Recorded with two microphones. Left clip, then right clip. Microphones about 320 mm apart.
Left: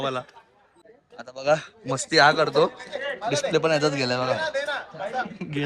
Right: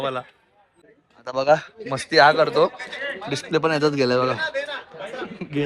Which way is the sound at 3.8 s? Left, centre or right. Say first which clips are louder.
Right 4 dB; centre.